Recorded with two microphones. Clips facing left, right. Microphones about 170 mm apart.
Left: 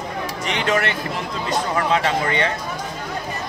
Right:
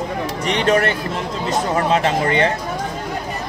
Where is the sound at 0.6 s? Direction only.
40° right (ahead or behind).